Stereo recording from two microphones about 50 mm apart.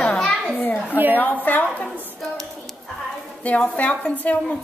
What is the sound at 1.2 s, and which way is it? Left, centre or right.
Speech, left.